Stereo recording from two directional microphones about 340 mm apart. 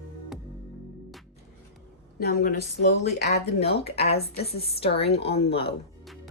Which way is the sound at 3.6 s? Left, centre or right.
Centre.